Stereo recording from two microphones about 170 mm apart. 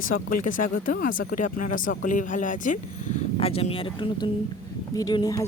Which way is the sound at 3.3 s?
35° left (ahead or behind).